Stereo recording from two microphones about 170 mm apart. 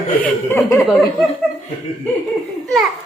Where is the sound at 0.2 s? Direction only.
15° left (ahead or behind).